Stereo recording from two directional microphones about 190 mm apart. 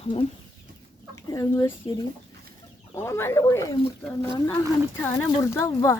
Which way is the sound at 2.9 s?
15° left (ahead or behind).